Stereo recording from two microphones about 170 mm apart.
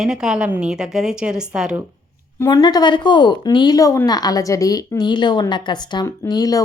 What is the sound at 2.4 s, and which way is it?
Speech, 25° left (ahead or behind).